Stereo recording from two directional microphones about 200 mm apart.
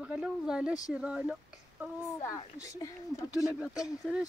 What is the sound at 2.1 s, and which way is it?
Speech, 15° left (ahead or behind).